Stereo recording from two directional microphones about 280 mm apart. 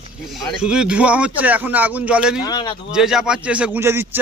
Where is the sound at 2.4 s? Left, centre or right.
Centre.